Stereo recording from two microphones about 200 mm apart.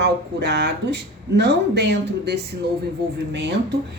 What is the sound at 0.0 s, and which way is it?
Speech, 55° right (ahead or behind).